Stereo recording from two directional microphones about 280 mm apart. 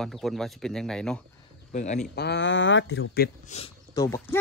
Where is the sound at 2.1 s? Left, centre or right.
Left.